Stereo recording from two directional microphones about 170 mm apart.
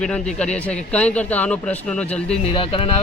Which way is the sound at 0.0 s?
5° left (ahead or behind).